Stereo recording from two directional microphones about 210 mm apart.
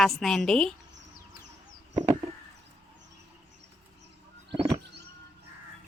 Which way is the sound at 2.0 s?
20° right (ahead or behind).